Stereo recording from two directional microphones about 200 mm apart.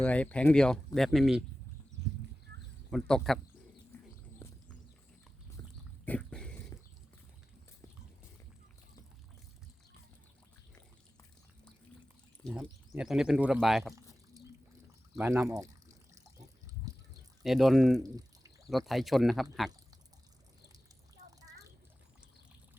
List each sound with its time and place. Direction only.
0.0 s speech: 5° left (ahead or behind)
2.5 s a sound: 55° right (ahead or behind)
2.9 s speech: 5° left (ahead or behind)
5.6 s dog: 15° left (ahead or behind)
6.1 s dog: 5° left (ahead or behind)
12.5 s speech: 5° right (ahead or behind)
15.1 s speech: 10° right (ahead or behind)
16.4 s a sound: 15° right (ahead or behind)
17.4 s speech: centre (ahead or behind)
18.0 s a sound: 20° right (ahead or behind)
18.7 s speech: centre (ahead or behind)